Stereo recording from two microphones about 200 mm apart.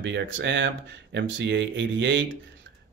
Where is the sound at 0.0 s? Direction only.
65° right (ahead or behind).